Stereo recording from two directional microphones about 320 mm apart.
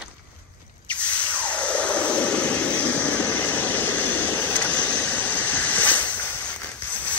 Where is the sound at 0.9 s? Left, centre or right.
Centre.